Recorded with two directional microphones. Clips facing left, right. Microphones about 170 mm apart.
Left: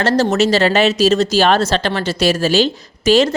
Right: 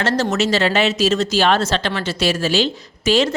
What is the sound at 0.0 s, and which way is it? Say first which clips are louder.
Speech: left 4 dB; 35° left (ahead or behind).